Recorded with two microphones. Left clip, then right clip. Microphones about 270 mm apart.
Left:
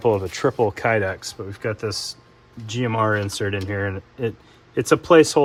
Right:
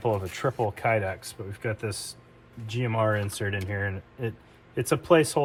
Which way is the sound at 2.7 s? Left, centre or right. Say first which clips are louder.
Left 5 dB; left.